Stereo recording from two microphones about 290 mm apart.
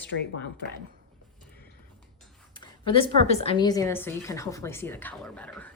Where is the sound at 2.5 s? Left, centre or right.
Centre.